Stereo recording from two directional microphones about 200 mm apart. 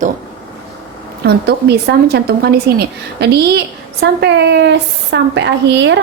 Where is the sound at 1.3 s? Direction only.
55° right (ahead or behind).